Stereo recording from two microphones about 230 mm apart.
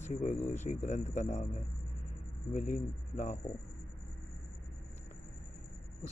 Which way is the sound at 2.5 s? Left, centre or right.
Left.